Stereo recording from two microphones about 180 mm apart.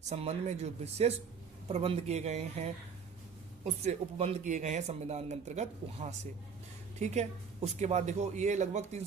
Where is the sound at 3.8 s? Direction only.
35° right (ahead or behind).